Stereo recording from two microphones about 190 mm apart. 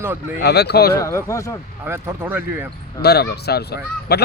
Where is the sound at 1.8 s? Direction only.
10° right (ahead or behind).